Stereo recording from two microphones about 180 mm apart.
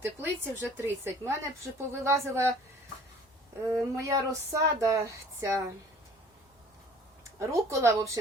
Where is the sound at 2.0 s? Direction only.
15° right (ahead or behind).